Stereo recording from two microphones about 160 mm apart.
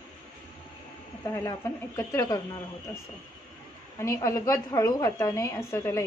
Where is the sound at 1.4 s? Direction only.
20° left (ahead or behind).